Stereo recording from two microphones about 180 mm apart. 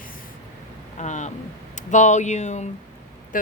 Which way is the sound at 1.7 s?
40° left (ahead or behind).